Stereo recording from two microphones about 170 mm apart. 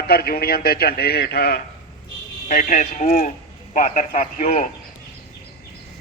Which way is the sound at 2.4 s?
45° left (ahead or behind).